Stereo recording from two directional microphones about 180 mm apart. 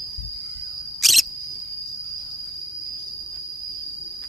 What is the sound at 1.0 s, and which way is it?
Cricket, centre (ahead or behind).